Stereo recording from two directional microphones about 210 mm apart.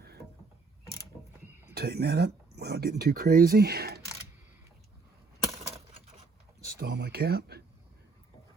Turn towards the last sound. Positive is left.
turn(degrees=-50)  # may be behind; listen again after turning